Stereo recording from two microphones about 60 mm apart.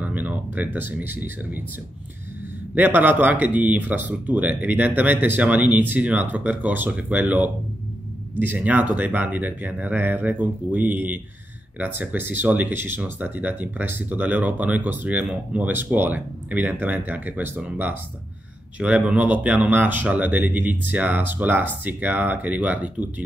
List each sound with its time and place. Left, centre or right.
0.0 s a sound: right
0.7 s speech: right
2.7 s speech: right